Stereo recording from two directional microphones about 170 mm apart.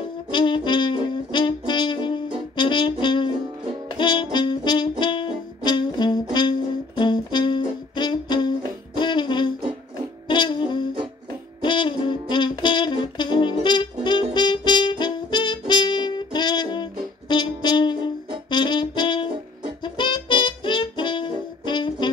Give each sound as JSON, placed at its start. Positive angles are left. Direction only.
{"t": 0.3, "sound": "saxophone", "side_deg": 30}
{"t": 2.5, "sound": "brass instrument", "side_deg": 30}
{"t": 3.9, "sound": "music", "side_deg": 30}
{"t": 5.6, "sound": "brass instrument", "side_deg": 25}
{"t": 7.0, "sound": "music", "side_deg": 25}
{"t": 18.5, "sound": "saxophone", "side_deg": 25}
{"t": 19.8, "sound": "music", "side_deg": 30}